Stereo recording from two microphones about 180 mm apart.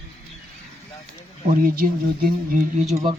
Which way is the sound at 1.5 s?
55° right (ahead or behind).